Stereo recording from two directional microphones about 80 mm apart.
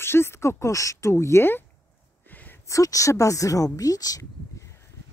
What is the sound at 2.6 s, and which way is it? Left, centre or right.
Speech, left.